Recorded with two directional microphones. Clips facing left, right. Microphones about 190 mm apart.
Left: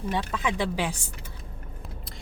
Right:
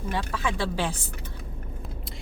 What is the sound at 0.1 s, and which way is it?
Speech, 20° left (ahead or behind).